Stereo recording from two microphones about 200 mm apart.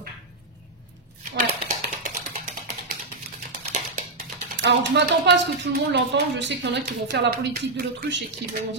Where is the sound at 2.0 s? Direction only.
40° right (ahead or behind).